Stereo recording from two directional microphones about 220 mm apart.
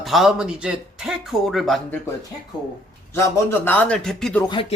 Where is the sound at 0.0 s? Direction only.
Centre (ahead or behind).